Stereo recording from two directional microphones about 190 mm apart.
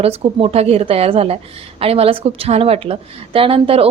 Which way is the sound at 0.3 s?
30° right (ahead or behind).